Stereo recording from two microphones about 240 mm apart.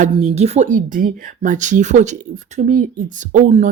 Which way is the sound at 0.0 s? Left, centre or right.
Right.